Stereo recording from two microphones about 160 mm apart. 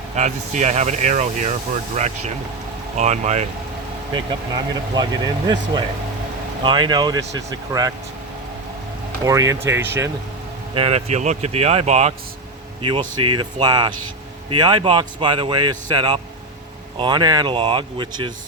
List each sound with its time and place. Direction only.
0.2 s speech: 45° right (ahead or behind)
4.1 s speech: 25° right (ahead or behind)
9.2 s speech: 20° right (ahead or behind)
10.8 s speech: 40° right (ahead or behind)
12.8 s speech: 30° right (ahead or behind)